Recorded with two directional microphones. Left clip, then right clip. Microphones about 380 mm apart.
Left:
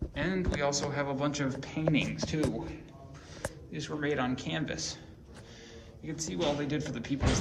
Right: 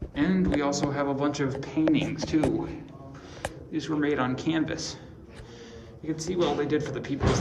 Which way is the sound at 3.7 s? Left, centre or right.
Centre.